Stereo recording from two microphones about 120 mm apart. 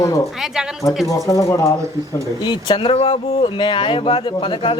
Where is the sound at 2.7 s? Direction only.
50° left (ahead or behind).